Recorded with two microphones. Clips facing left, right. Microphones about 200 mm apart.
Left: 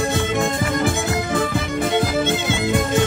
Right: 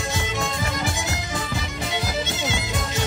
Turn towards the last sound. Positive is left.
turn(degrees=55)  # may be behind; listen again after turning